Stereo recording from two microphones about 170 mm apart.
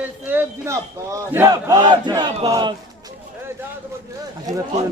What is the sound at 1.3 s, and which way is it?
Battle cry, 15° right (ahead or behind).